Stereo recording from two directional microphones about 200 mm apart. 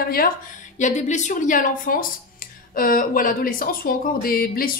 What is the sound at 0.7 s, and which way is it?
A woman's voice, 35° left (ahead or behind).